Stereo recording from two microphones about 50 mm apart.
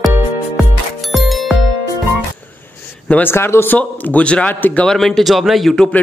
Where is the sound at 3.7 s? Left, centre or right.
Left.